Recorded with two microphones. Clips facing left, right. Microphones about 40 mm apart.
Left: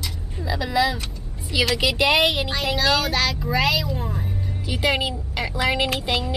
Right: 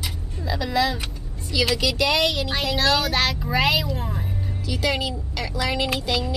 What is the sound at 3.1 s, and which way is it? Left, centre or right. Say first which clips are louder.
Speech: even; centre.